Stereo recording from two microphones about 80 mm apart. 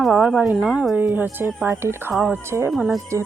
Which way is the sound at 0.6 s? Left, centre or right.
Centre.